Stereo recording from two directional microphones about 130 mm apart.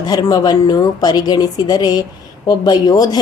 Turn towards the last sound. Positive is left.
turn(degrees=30)  # may be behind; listen again after turning